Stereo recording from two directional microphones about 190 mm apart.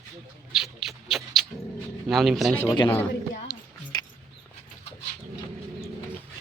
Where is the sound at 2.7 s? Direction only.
25° left (ahead or behind).